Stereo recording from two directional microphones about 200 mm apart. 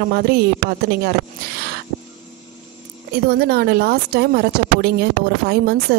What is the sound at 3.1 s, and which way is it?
A woman's voice, 50° right (ahead or behind).